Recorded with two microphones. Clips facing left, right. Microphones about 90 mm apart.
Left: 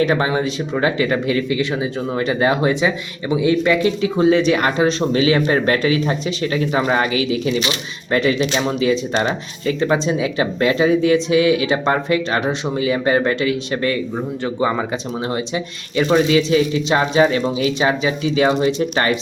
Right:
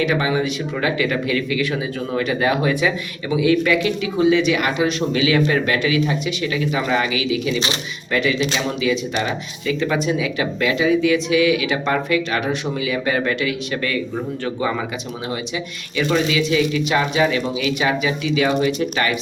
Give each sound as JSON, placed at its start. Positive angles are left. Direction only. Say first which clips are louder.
{"t": 0.0, "sound": "speech", "louder": "left 2 dB", "side_deg": 35}